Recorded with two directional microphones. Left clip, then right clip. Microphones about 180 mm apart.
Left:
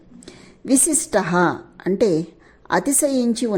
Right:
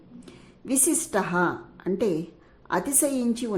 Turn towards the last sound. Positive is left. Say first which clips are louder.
# left 7 dB
turn(degrees=25)  # may be behind; listen again after turning